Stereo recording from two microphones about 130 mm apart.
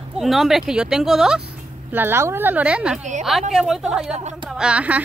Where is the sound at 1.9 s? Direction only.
20° right (ahead or behind).